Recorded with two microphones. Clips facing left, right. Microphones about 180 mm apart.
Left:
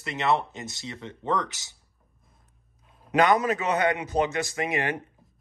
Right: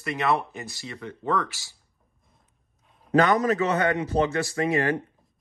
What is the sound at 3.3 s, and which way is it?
Speech, 40° right (ahead or behind).